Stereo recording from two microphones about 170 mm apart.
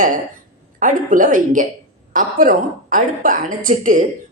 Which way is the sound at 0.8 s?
50° right (ahead or behind).